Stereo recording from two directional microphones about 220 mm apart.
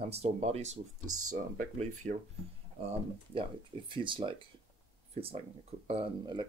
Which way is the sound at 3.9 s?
20° right (ahead or behind).